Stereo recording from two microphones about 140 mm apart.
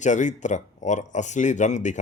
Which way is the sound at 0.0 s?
60° left (ahead or behind).